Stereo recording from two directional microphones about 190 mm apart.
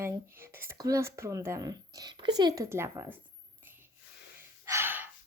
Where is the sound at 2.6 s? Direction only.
15° right (ahead or behind).